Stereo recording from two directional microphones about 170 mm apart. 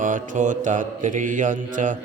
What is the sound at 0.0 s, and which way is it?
Mantra, 50° right (ahead or behind).